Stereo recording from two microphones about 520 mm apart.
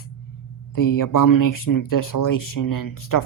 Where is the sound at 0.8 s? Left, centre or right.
Left.